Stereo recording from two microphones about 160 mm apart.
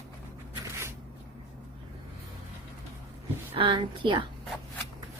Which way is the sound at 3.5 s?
35° right (ahead or behind).